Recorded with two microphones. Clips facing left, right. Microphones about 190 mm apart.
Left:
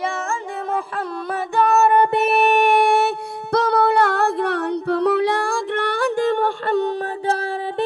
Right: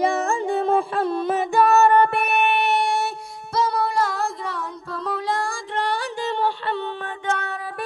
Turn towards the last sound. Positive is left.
turn(degrees=40)  # may be behind; listen again after turning